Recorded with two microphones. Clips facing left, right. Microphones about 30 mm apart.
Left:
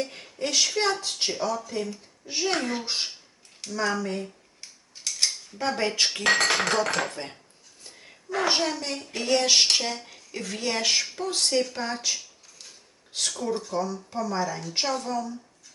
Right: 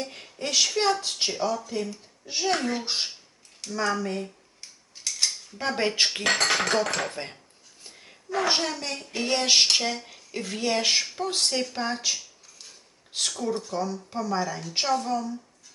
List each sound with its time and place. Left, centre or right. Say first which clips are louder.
0.0 s a woman's voice: left 2 dB; centre
3.7 s cutlery: even; centre
5.5 s speech: even; centre
6.2 s a woman's voice: left 3 dB; centre
7.1 s speech: right 1 dB; centre
9.2 s speech: left 1 dB; centre
9.6 s a woman's voice: right 1 dB; centre
11.7 s a sound: right 1 dB; centre
13.1 s a woman's voice: right 1 dB; centre
13.4 s a woman's voice: left 1 dB; centre